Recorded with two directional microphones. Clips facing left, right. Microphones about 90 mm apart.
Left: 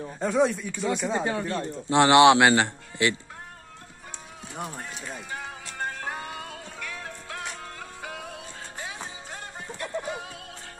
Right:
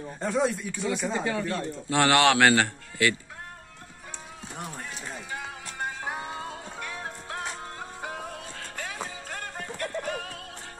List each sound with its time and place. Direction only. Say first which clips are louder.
0.2 s speech: left 3 dB; centre (ahead or behind)
1.1 s a man's voice: left 1 dB; 30° left (ahead or behind)
5.7 s music: left 1 dB; 5° right (ahead or behind)
6.3 s music: right 2 dB; 25° right (ahead or behind)
8.5 s music: right 2 dB; 55° right (ahead or behind)